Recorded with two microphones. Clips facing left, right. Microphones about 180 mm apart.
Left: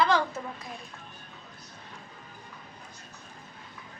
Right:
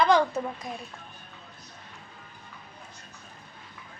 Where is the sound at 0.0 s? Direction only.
15° right (ahead or behind).